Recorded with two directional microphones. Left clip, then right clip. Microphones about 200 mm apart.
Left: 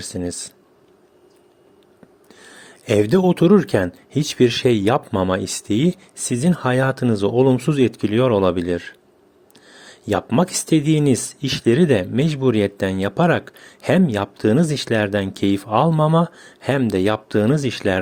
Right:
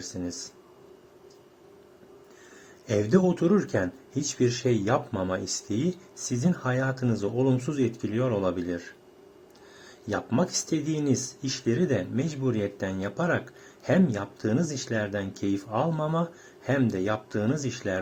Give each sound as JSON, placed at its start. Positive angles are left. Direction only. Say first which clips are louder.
{"t": 0.0, "sound": "speech", "louder": "left 8 dB", "side_deg": 40}
{"t": 2.8, "sound": "speech", "louder": "left 8 dB", "side_deg": 40}
{"t": 10.1, "sound": "speech", "louder": "left 9 dB", "side_deg": 40}